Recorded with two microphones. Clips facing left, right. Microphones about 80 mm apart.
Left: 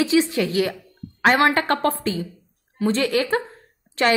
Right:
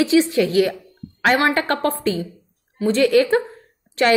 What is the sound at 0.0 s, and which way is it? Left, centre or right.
A woman's voice, left.